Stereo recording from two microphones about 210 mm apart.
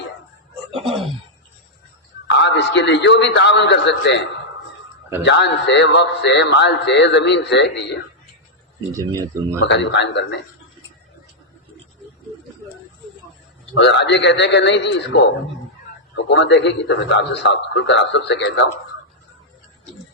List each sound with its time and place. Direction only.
2.4 s a man's voice: 60° left (ahead or behind)
8.9 s speech: 15° right (ahead or behind)
9.6 s a man's voice: 60° left (ahead or behind)
13.7 s a man's voice: 55° left (ahead or behind)